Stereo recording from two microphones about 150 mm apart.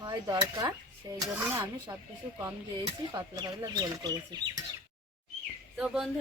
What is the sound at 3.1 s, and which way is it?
Speech, 25° right (ahead or behind).